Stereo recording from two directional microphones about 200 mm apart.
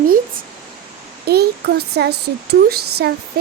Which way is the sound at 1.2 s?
50° right (ahead or behind).